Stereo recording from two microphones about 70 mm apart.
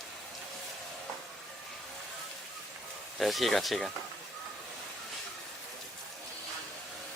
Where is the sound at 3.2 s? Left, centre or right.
Centre.